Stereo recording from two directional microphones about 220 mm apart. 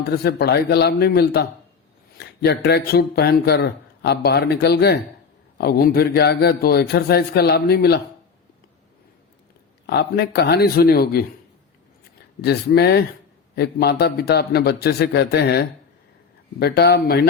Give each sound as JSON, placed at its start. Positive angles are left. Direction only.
{"t": 0.1, "sound": "speech", "side_deg": 45}
{"t": 9.8, "sound": "speech", "side_deg": 50}
{"t": 12.4, "sound": "speech", "side_deg": 45}